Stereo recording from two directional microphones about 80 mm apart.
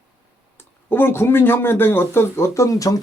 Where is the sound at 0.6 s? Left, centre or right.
Left.